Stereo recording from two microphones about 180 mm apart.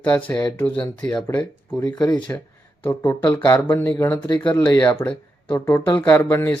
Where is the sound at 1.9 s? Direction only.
25° left (ahead or behind).